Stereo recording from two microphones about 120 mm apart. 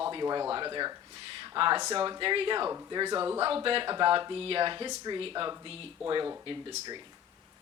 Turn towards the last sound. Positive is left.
turn(degrees=-40)  # may be behind; listen again after turning